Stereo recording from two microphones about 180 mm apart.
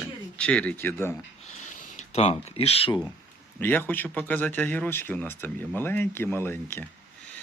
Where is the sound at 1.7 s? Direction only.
40° left (ahead or behind).